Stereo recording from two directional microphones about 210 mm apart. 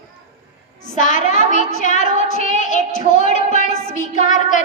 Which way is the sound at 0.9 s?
35° left (ahead or behind).